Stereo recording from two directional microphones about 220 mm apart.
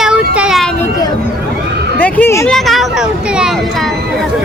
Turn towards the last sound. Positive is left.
turn(degrees=0)  # may be behind; listen again after turning